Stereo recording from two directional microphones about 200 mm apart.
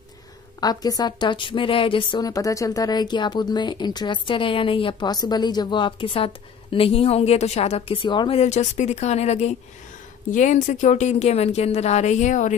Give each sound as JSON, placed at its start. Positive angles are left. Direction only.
{"t": 0.6, "sound": "a woman's voice", "side_deg": 20}